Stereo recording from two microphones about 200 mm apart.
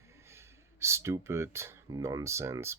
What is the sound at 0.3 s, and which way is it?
Speech, 15° right (ahead or behind).